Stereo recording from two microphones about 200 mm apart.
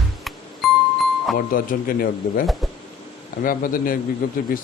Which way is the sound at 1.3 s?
45° left (ahead or behind).